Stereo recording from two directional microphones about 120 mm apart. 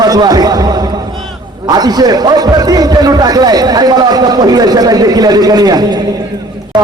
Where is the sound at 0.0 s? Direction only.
35° right (ahead or behind).